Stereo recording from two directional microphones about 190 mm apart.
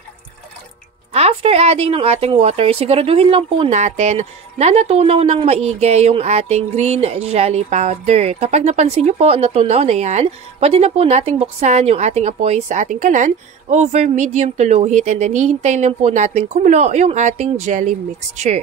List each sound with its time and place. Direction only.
1.1 s speech: 35° right (ahead or behind)